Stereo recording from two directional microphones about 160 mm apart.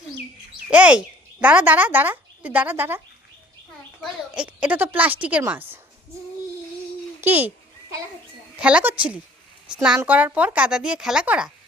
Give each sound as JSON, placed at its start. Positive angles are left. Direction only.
{"t": 0.7, "sound": "speech", "side_deg": -10}
{"t": 4.0, "sound": "a woman's voice", "side_deg": -5}
{"t": 7.2, "sound": "a child's voice", "side_deg": -10}
{"t": 8.5, "sound": "a woman's voice", "side_deg": -5}